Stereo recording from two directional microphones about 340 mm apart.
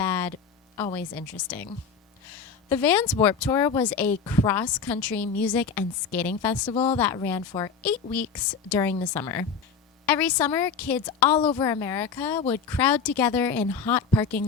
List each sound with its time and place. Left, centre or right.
0.0 s a sound: centre
0.8 s speech: centre
2.6 s a woman's voice: centre
6.7 s a woman's voice: centre
12.8 s a woman's voice: centre